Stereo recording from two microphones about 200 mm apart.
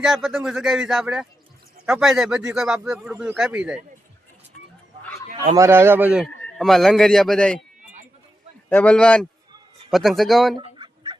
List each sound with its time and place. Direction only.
0.0 s speech: centre (ahead or behind)
5.5 s a man's voice: 10° right (ahead or behind); by 7.6 s 5° left (ahead or behind)
8.7 s speech: 5° left (ahead or behind)
10.6 s chicken: 25° right (ahead or behind)